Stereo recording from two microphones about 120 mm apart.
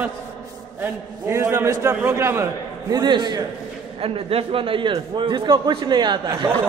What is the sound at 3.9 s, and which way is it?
A man's voice, 50° right (ahead or behind).